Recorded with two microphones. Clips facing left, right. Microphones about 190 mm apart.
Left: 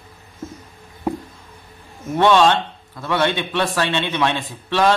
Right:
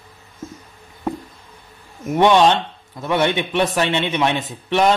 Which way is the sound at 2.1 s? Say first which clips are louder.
Right 1 dB; 15° right (ahead or behind).